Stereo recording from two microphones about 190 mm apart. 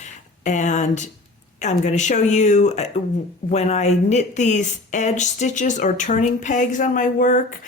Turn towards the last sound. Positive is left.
turn(degrees=45)  # may be behind; listen again after turning